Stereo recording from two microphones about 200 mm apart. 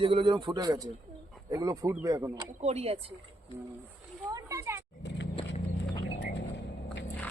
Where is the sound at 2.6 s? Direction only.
30° right (ahead or behind).